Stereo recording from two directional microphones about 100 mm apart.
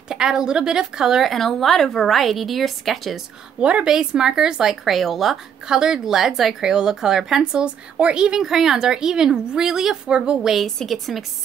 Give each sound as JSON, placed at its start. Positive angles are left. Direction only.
{"t": 0.1, "sound": "speech", "side_deg": -5}